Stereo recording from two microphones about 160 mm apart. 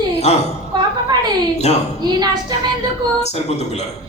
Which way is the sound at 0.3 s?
40° left (ahead or behind).